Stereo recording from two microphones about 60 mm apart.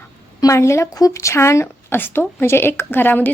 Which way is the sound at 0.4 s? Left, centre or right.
Left.